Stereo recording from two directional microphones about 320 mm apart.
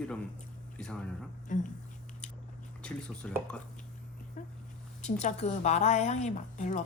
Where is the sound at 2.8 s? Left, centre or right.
Centre.